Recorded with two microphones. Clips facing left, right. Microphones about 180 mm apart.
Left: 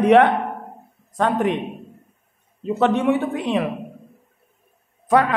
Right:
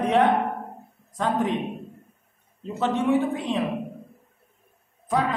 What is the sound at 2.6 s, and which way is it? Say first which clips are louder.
A man's voice: left 5 dB; 65° left (ahead or behind).